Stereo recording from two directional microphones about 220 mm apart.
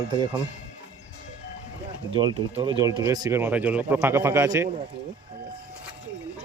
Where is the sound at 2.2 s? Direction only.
20° right (ahead or behind).